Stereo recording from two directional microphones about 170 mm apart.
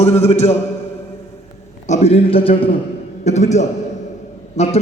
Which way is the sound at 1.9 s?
40° left (ahead or behind).